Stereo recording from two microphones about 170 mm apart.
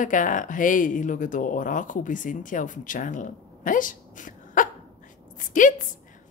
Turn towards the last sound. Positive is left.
turn(degrees=50)  # may be behind; listen again after turning